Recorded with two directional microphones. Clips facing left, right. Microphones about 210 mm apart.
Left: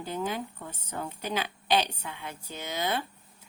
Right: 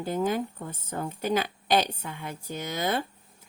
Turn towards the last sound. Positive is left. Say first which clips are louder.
# right 3 dB
turn(degrees=-50)  # may be behind; listen again after turning